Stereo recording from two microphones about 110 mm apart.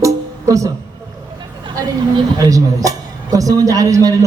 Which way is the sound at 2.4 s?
30° right (ahead or behind).